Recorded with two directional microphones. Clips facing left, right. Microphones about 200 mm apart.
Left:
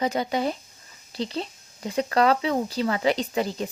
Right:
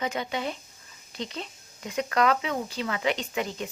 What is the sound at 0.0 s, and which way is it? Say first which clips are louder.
Speech: left 5 dB; 35° left (ahead or behind).